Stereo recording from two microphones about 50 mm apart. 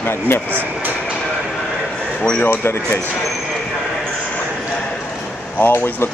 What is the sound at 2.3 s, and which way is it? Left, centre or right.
Speech, left.